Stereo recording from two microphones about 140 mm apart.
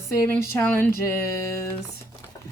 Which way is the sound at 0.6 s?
10° left (ahead or behind).